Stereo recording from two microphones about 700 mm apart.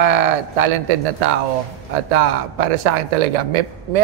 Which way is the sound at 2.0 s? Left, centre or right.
Right.